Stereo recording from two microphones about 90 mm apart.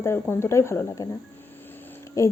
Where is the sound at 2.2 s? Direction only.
35° left (ahead or behind).